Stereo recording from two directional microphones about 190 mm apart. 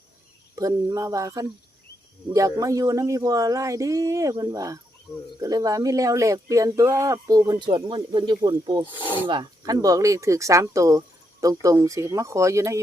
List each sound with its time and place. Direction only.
0.5 s speech: 20° right (ahead or behind)
8.9 s speech: 25° left (ahead or behind)
9.2 s speech: 25° right (ahead or behind)